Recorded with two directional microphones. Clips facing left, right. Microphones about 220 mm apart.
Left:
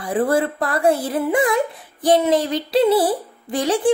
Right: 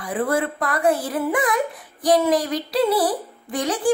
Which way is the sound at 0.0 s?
30° left (ahead or behind).